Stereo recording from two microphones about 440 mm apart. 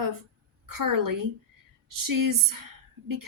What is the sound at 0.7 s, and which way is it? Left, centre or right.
A woman's voice, right.